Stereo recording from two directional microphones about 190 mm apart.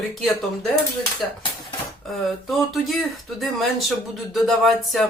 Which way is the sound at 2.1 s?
Centre (ahead or behind).